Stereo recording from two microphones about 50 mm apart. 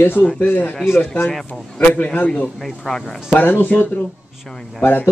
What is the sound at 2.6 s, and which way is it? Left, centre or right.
Speech, centre.